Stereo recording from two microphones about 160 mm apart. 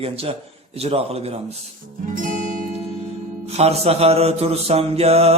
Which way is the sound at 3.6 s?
40° right (ahead or behind).